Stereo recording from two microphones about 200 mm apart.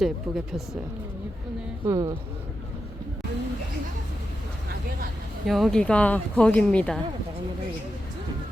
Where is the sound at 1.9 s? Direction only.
20° right (ahead or behind).